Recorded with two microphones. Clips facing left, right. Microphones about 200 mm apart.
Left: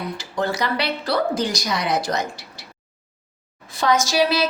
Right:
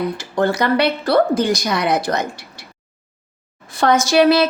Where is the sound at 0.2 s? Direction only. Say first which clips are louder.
Right 3 dB; 55° right (ahead or behind).